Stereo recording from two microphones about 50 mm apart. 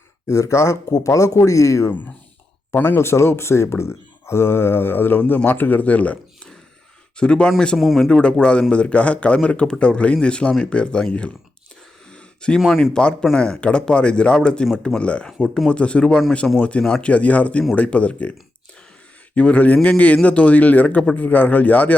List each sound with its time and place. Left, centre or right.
0.3 s speech: left
1.9 s speech: left
2.8 s speech: left; by 7.5 s centre
7.8 s speech: centre
8.2 s speech: left
12.1 s a sound: centre
12.5 s speech: centre
12.9 s speech: left
15.4 s speech: centre
15.7 s speech: left